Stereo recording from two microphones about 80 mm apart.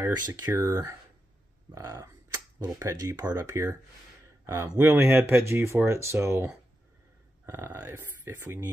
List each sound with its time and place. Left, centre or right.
0.1 s speech: right
0.6 s speech: right
4.7 s speech: right
7.4 s speech: right